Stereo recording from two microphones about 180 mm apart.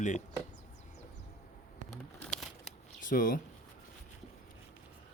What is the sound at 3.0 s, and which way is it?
Speech, 50° left (ahead or behind).